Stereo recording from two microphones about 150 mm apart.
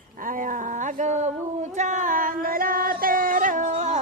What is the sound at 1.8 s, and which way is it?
Singing, 55° right (ahead or behind).